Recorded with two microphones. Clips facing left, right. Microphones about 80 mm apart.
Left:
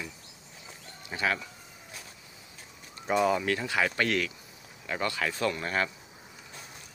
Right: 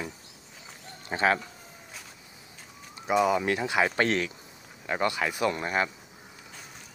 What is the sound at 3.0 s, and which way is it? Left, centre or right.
Speech, centre.